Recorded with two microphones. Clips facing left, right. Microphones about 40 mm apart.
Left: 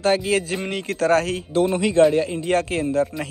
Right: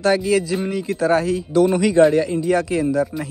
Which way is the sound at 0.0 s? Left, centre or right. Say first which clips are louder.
Right 2 dB; left.